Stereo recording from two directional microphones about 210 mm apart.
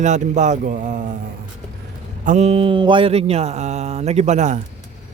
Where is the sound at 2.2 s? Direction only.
30° right (ahead or behind).